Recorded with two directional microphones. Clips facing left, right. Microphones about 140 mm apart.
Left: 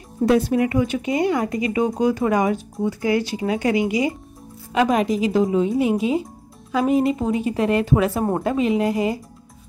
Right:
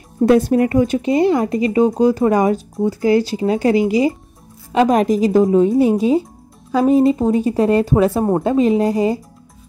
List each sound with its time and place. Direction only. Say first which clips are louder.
0.2 s speech: right 5 dB; 45° right (ahead or behind)